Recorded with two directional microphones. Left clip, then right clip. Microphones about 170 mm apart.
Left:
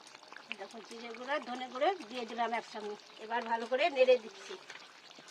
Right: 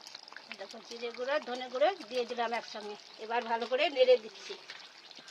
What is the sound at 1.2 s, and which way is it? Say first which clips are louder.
Speech: right 3 dB; 25° right (ahead or behind).